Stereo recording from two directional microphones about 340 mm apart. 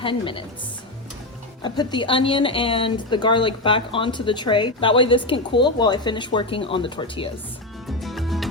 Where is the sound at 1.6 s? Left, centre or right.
Centre.